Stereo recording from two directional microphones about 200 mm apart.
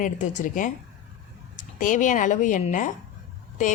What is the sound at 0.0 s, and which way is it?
A woman's voice, 40° left (ahead or behind).